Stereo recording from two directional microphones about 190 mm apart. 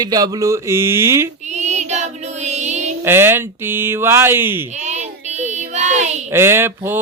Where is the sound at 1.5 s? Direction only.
35° right (ahead or behind).